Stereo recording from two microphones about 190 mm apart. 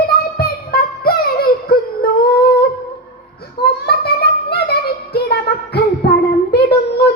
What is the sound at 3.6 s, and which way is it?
Child singing, 55° left (ahead or behind).